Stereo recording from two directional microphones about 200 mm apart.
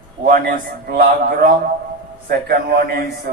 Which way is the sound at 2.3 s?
50° right (ahead or behind).